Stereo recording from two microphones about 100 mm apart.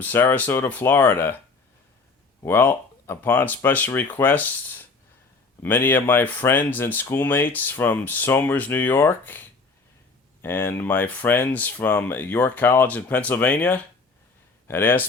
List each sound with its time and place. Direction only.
0.0 s speech: 20° left (ahead or behind)
2.4 s speech: 25° left (ahead or behind)